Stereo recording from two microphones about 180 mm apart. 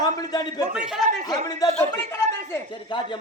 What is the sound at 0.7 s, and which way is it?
Speech, 5° right (ahead or behind).